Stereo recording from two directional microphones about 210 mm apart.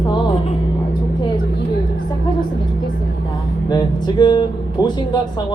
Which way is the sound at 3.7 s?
20° left (ahead or behind).